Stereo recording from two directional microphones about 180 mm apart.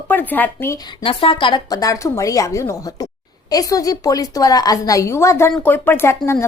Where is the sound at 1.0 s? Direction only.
30° left (ahead or behind).